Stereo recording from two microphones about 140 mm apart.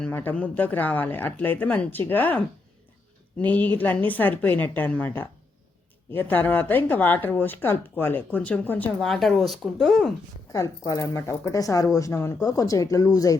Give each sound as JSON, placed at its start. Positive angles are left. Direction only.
{"t": 0.0, "sound": "speech", "side_deg": 15}
{"t": 9.0, "sound": "speech", "side_deg": 0}
{"t": 10.5, "sound": "speech", "side_deg": 25}